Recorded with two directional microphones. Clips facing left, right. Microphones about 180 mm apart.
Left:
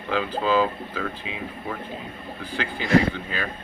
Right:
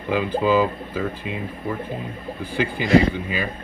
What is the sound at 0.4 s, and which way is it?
Speech, 10° right (ahead or behind).